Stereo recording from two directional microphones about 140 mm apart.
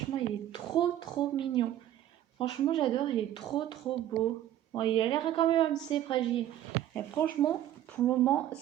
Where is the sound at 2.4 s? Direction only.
35° left (ahead or behind).